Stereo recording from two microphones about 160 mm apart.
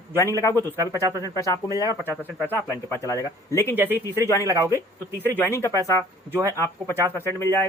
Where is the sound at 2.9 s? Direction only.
20° left (ahead or behind).